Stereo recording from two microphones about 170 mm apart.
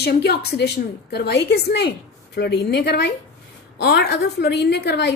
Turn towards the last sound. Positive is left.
turn(degrees=80)